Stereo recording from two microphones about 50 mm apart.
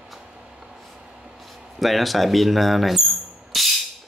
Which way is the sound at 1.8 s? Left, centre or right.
Centre.